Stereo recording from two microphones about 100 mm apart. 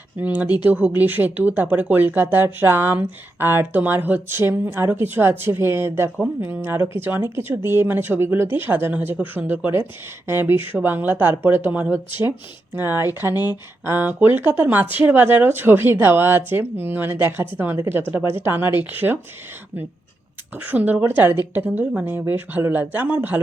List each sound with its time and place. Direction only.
0.2 s speech: 15° right (ahead or behind)
20.6 s speech: 15° right (ahead or behind)